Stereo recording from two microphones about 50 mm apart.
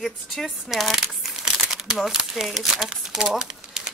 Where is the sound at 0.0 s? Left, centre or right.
Centre.